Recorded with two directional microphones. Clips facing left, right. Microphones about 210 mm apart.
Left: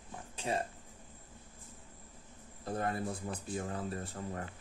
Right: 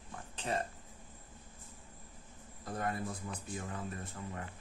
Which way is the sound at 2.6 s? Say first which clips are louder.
Left 2 dB; 30° left (ahead or behind).